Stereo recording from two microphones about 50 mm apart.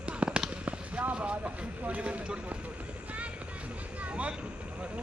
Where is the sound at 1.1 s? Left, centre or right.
Right.